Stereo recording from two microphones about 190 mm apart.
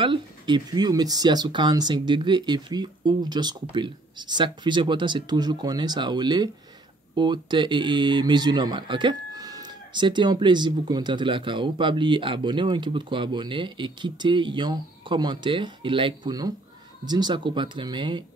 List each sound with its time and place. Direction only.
0.0 s speech: 25° right (ahead or behind)